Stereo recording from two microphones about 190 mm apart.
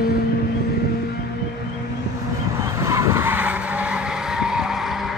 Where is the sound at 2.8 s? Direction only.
15° right (ahead or behind).